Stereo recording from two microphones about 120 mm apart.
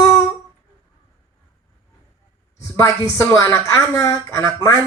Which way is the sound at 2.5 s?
25° left (ahead or behind).